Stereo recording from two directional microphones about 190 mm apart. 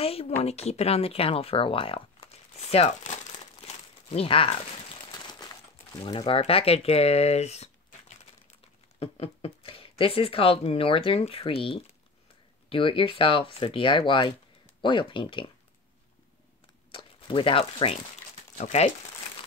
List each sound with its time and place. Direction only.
0.0 s speech: 30° left (ahead or behind)
3.6 s crumpling: 30° left (ahead or behind)
5.3 s speech: 20° left (ahead or behind)
9.0 s speech: 30° left (ahead or behind)
16.9 s speech: 25° left (ahead or behind)